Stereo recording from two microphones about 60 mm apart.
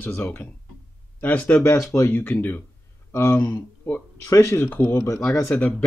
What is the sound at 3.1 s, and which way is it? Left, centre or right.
Speech, left.